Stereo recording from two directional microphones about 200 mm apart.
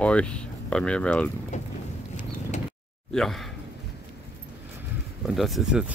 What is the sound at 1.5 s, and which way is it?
Vehicle, 35° left (ahead or behind).